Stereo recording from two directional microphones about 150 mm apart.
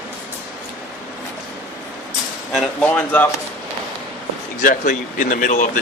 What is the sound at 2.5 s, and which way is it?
Speech, 10° left (ahead or behind).